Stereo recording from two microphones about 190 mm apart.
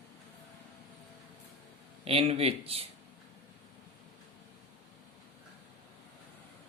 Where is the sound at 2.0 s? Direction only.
30° right (ahead or behind).